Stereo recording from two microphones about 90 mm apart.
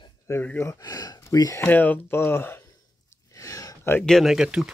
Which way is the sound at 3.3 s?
40° left (ahead or behind).